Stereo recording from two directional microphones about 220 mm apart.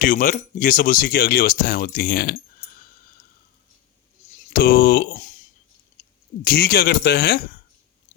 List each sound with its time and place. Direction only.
0.0 s speech: 40° left (ahead or behind)
4.4 s speech: 40° left (ahead or behind)
6.4 s speech: 45° left (ahead or behind)